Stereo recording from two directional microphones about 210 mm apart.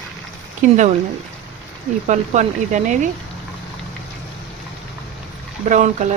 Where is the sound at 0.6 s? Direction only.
35° right (ahead or behind).